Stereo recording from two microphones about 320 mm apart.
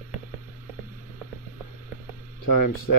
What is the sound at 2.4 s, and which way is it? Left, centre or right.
Speech, left.